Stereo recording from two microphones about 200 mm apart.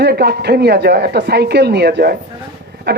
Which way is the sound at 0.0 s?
55° right (ahead or behind).